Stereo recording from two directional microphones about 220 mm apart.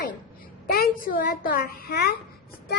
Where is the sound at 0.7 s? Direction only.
40° left (ahead or behind).